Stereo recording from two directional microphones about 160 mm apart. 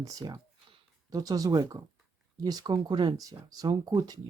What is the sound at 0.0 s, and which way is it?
Speech, 20° right (ahead or behind).